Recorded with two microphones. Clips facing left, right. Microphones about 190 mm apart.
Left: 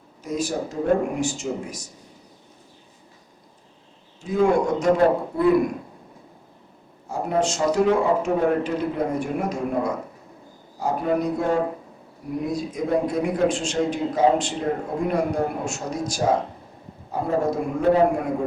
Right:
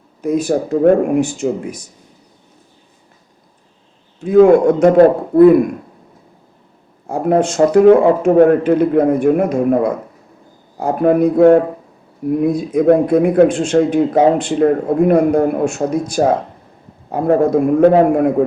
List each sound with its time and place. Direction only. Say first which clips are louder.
0.2 s a man's voice: right 10 dB; 55° right (ahead or behind)
4.2 s a man's voice: right 11 dB; 55° right (ahead or behind)
7.1 s a man's voice: right 8 dB; 55° right (ahead or behind)